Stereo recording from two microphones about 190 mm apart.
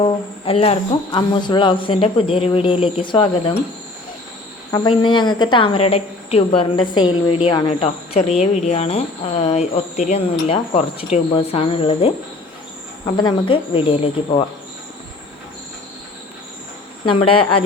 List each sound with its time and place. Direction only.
0.0 s speech: 30° left (ahead or behind)
4.7 s speech: 25° left (ahead or behind)
13.1 s speech: 25° left (ahead or behind)